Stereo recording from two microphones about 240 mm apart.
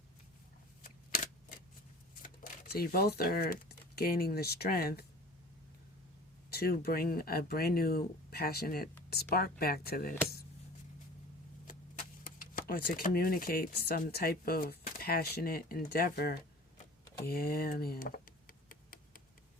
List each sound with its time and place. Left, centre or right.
2.2 s speech: left
6.5 s speech: left
11.6 s speech: left
17.2 s a sound: left